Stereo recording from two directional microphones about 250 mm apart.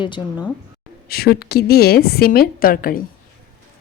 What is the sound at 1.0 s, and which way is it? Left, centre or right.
A woman's voice, left.